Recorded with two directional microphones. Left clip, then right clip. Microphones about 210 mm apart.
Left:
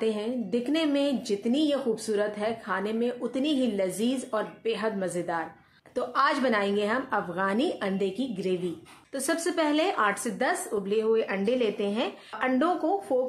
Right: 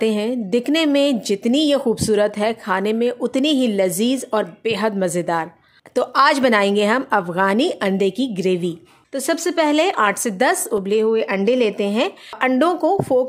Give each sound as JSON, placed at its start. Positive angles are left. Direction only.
{"t": 0.0, "sound": "a woman's voice", "side_deg": -50}